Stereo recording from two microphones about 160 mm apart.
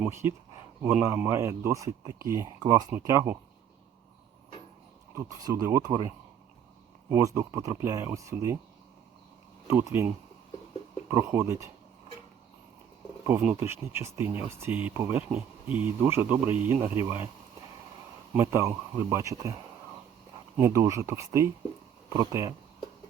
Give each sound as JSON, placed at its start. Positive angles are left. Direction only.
{"t": 0.0, "sound": "speech", "side_deg": -15}
{"t": 5.1, "sound": "speech", "side_deg": -20}
{"t": 7.1, "sound": "speech", "side_deg": -15}
{"t": 9.6, "sound": "speech", "side_deg": -15}
{"t": 11.1, "sound": "speech", "side_deg": -20}
{"t": 13.4, "sound": "speech", "side_deg": -10}
{"t": 18.3, "sound": "speech", "side_deg": -15}
{"t": 20.6, "sound": "speech", "side_deg": -20}